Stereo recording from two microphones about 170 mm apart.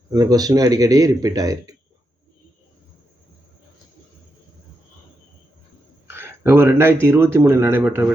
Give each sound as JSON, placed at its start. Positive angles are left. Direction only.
{"t": 0.1, "sound": "a man's voice", "side_deg": -20}
{"t": 6.1, "sound": "speech", "side_deg": -15}